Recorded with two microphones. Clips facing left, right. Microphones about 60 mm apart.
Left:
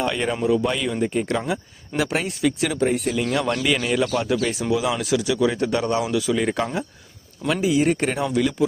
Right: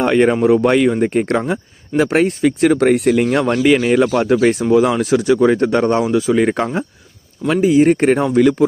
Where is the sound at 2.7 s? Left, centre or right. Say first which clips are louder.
Right 9 dB; right.